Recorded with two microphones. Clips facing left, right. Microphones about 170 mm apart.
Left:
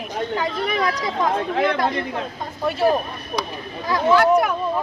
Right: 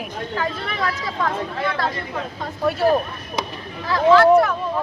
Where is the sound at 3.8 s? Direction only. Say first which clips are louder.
Right 3 dB; 15° left (ahead or behind).